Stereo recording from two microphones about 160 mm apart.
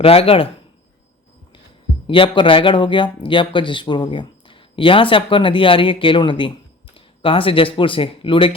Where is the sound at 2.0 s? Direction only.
30° left (ahead or behind).